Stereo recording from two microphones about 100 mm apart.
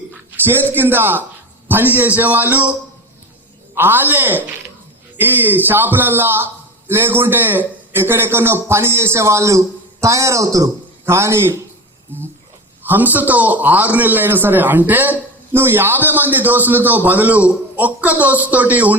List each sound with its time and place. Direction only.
0.4 s a man's voice: 20° right (ahead or behind)
3.8 s a man's voice: 20° right (ahead or behind)
12.8 s a man's voice: 20° right (ahead or behind)